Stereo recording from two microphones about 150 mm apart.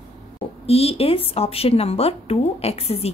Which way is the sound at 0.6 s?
40° left (ahead or behind).